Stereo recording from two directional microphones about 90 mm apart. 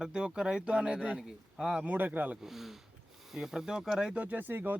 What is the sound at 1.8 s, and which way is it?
Speech, 15° right (ahead or behind).